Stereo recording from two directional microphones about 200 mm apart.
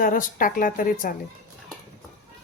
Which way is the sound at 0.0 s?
45° left (ahead or behind).